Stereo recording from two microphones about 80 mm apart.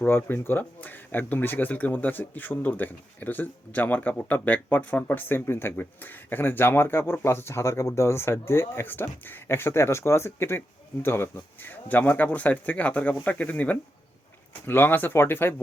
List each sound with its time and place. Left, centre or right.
0.0 s speech: left